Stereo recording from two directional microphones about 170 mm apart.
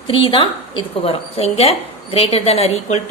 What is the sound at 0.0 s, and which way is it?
A woman's voice, 30° left (ahead or behind).